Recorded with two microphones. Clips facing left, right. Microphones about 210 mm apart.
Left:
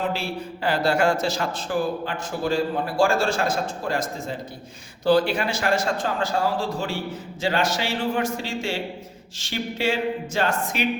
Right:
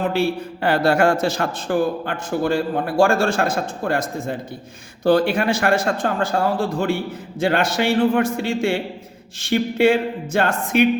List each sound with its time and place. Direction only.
0.1 s a man's voice: 55° right (ahead or behind)